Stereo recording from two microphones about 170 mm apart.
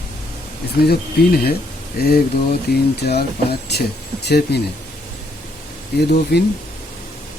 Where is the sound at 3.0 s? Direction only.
70° left (ahead or behind).